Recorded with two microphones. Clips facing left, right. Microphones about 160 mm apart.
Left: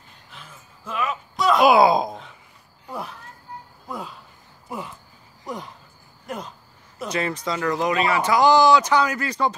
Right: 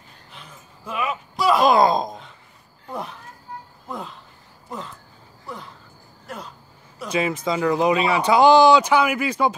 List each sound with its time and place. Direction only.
0.3 s a sound: centre (ahead or behind)
7.1 s speech: 10° right (ahead or behind)
8.8 s speech: 10° right (ahead or behind)